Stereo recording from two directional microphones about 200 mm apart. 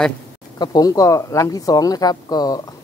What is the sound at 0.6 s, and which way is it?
Speech, 20° left (ahead or behind).